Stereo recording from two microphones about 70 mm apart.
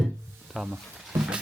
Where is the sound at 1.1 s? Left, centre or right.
Centre.